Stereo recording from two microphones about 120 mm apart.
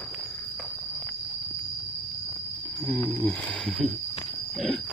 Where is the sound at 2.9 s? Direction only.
15° left (ahead or behind).